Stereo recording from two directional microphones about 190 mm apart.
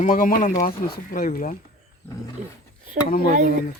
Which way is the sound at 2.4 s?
40° right (ahead or behind).